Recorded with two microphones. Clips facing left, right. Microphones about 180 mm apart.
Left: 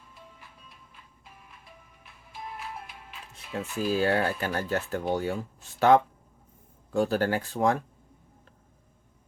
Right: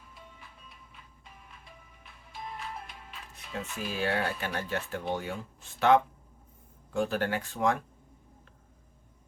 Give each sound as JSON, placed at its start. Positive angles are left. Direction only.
{"t": 0.1, "sound": "music", "side_deg": 0}
{"t": 3.6, "sound": "speech", "side_deg": 0}
{"t": 4.0, "sound": "speech", "side_deg": 40}